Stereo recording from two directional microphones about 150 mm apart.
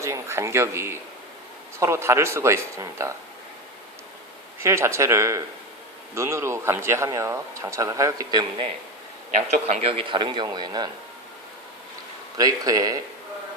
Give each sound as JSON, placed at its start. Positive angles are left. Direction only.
{"t": 0.0, "sound": "speech", "side_deg": -20}
{"t": 4.6, "sound": "speech", "side_deg": -20}
{"t": 9.6, "sound": "speech", "side_deg": -45}
{"t": 12.4, "sound": "speech", "side_deg": -25}